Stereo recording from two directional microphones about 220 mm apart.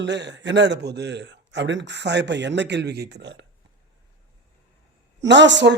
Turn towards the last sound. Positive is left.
turn(degrees=-55)  # may be behind; listen again after turning